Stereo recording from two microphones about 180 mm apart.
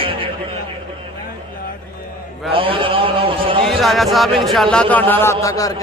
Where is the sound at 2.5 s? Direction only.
30° right (ahead or behind).